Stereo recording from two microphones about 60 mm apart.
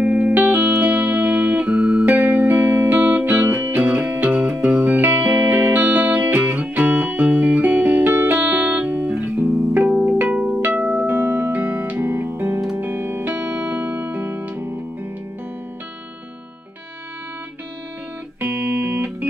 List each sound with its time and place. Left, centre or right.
0.0 s music: right
9.8 s music: centre
11.1 s music: right
18.4 s music: right